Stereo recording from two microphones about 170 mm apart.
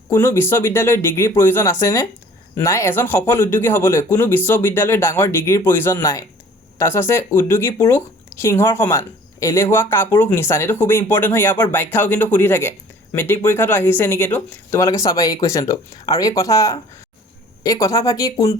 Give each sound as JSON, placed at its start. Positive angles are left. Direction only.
{"t": 0.1, "sound": "speech", "side_deg": 15}